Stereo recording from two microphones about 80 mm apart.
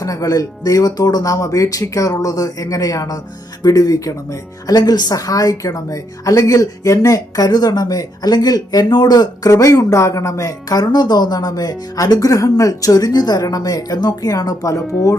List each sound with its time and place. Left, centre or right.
0.0 s a woman's voice: left
9.5 s a woman's voice: left